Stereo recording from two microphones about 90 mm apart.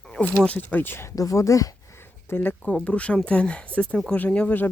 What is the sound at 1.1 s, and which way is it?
Speech, 35° left (ahead or behind).